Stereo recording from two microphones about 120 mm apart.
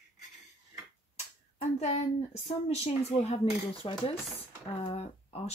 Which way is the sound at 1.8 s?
70° left (ahead or behind).